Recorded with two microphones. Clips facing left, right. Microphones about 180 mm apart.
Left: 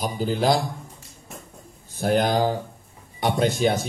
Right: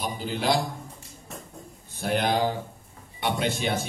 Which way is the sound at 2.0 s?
40° left (ahead or behind).